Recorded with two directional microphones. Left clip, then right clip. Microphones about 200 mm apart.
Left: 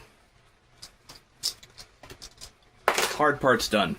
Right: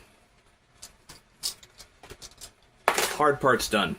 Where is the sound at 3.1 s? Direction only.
5° right (ahead or behind).